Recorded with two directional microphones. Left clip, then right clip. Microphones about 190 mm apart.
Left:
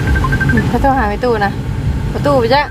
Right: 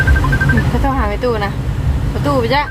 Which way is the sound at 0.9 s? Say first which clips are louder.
Left 5 dB; 20° left (ahead or behind).